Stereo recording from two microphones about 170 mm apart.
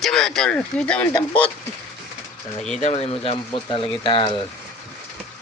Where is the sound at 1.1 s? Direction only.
30° left (ahead or behind).